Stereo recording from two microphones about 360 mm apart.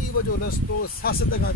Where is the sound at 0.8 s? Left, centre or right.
Left.